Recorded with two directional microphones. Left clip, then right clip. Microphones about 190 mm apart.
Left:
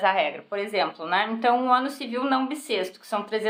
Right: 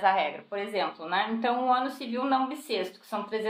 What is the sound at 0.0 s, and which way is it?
Speech, 25° left (ahead or behind).